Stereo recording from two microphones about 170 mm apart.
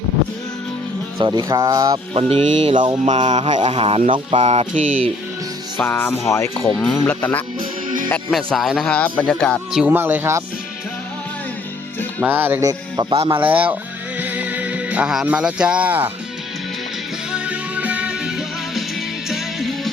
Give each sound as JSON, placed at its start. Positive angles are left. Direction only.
{"t": 1.2, "sound": "speech", "side_deg": -20}
{"t": 2.1, "sound": "speech", "side_deg": -35}
{"t": 5.7, "sound": "music", "side_deg": 10}
{"t": 8.1, "sound": "speech", "side_deg": 5}
{"t": 9.8, "sound": "speech", "side_deg": -10}
{"t": 12.2, "sound": "speech", "side_deg": -10}
{"t": 13.3, "sound": "speech", "side_deg": -10}
{"t": 14.2, "sound": "music", "side_deg": -10}
{"t": 17.3, "sound": "music", "side_deg": -10}